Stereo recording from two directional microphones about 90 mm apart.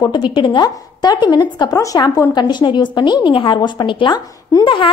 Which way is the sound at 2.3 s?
55° left (ahead or behind).